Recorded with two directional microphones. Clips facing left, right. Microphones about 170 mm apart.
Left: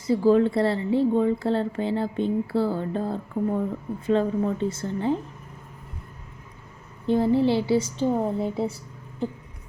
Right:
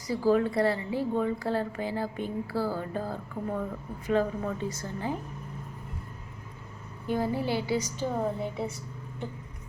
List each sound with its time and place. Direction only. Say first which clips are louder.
0.1 s speech: left 6 dB; 25° left (ahead or behind)
7.1 s speech: left 8 dB; 25° left (ahead or behind)